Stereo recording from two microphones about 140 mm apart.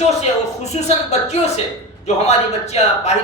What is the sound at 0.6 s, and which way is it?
Speech, 55° left (ahead or behind).